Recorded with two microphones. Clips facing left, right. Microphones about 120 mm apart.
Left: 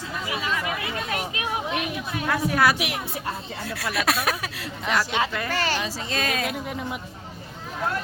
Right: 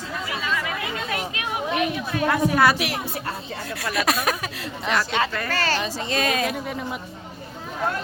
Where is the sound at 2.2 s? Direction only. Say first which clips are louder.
Right 3 dB; centre (ahead or behind).